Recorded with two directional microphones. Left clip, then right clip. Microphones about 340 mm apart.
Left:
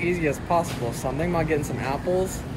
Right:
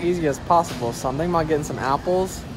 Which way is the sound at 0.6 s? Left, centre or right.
Right.